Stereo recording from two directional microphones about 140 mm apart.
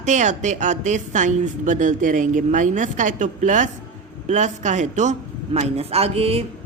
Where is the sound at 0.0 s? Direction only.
60° right (ahead or behind).